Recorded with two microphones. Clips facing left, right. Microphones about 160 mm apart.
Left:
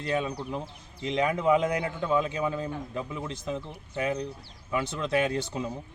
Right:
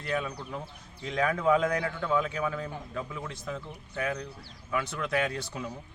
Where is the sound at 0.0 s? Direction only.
25° left (ahead or behind).